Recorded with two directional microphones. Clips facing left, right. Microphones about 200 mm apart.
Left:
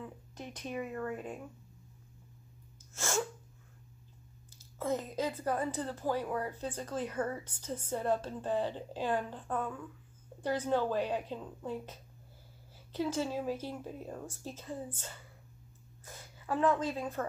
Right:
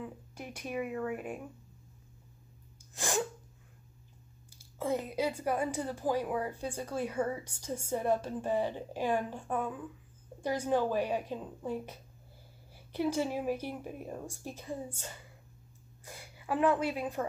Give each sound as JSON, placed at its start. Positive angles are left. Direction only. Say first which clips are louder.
{"t": 0.0, "sound": "speech", "louder": "right 2 dB", "side_deg": -10}
{"t": 2.9, "sound": "sneeze", "louder": "right 1 dB", "side_deg": -15}
{"t": 4.6, "sound": "a woman's voice", "louder": "right 1 dB", "side_deg": -10}